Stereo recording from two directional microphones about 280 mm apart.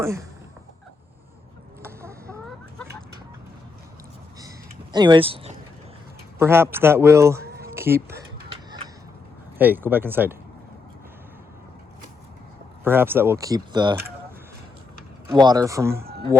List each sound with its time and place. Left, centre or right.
0.0 s speech: centre
1.8 s a sound: centre
4.4 s a sound: centre
6.4 s speech: centre
7.4 s a sound: right
7.7 s speech: centre
9.6 s speech: centre
12.8 s speech: centre
15.3 s speech: centre